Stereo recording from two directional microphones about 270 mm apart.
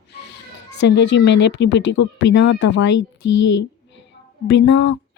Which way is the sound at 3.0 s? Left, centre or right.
Left.